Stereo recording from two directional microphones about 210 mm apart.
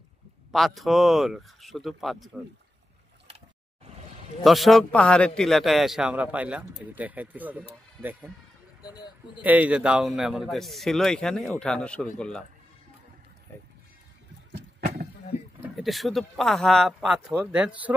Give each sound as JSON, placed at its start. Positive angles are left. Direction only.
{"t": 0.5, "sound": "a man's voice", "side_deg": 0}
{"t": 4.4, "sound": "a man's voice", "side_deg": 0}
{"t": 8.8, "sound": "a sound", "side_deg": 20}
{"t": 9.4, "sound": "a man's voice", "side_deg": -5}
{"t": 15.8, "sound": "a man's voice", "side_deg": 0}